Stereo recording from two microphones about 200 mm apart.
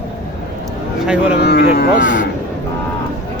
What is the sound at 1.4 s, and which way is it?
Speech, 50° left (ahead or behind).